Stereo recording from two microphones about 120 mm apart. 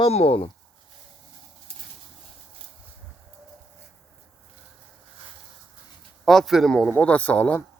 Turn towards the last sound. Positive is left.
turn(degrees=15)  # may be behind; listen again after turning